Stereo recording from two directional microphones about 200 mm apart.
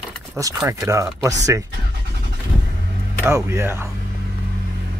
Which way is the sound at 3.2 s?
15° right (ahead or behind).